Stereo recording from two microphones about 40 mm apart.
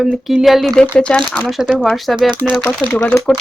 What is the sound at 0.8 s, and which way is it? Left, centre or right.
Speech, left.